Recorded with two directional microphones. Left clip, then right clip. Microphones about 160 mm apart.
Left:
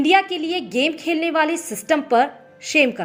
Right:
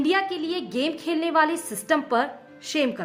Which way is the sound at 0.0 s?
20° left (ahead or behind).